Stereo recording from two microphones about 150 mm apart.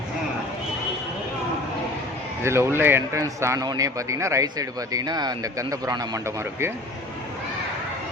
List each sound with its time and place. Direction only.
2.4 s a man's voice: 15° right (ahead or behind)